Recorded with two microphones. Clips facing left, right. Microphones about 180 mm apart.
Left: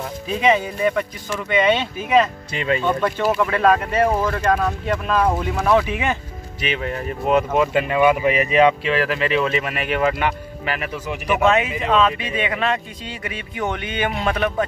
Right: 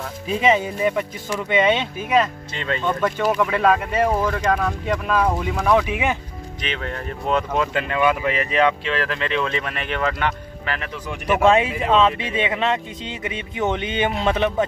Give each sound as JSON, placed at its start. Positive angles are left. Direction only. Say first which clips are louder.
{"t": 0.5, "sound": "speech", "louder": "left 1 dB", "side_deg": -20}
{"t": 2.1, "sound": "speech", "louder": "left 2 dB", "side_deg": 10}
{"t": 3.4, "sound": "speech", "louder": "left 1 dB", "side_deg": -5}
{"t": 4.6, "sound": "speech", "louder": "left 1 dB", "side_deg": 5}
{"t": 5.0, "sound": "speech", "louder": "left 2 dB", "side_deg": -5}
{"t": 5.9, "sound": "speech", "louder": "even", "side_deg": -15}
{"t": 6.6, "sound": "speech", "louder": "left 4 dB", "side_deg": 10}
{"t": 11.4, "sound": "speech", "louder": "right 2 dB", "side_deg": -30}